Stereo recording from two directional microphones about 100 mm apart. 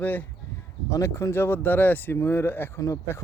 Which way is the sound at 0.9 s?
30° left (ahead or behind).